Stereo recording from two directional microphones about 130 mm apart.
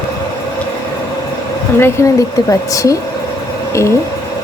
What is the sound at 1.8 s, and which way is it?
Speech, 20° left (ahead or behind).